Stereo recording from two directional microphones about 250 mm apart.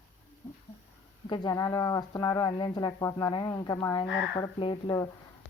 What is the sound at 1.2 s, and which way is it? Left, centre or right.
Speech, centre.